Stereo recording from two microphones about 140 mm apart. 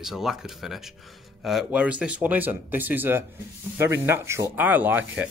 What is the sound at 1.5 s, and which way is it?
Rub, 5° right (ahead or behind).